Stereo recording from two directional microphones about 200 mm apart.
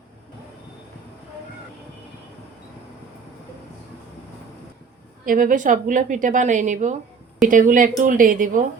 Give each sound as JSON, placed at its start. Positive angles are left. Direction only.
{"t": 5.2, "sound": "a woman's voice", "side_deg": -45}